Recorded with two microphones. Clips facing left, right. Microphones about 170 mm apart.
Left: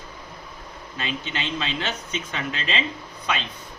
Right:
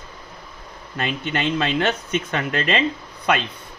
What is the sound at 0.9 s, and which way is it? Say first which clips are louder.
Speech: right 6 dB; 55° right (ahead or behind).